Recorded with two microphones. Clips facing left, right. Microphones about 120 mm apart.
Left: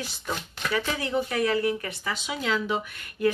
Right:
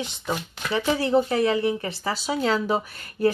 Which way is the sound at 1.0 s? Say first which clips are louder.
Right 7 dB; 30° right (ahead or behind).